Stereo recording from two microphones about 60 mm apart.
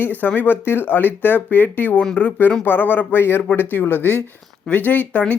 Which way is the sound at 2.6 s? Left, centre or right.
Left.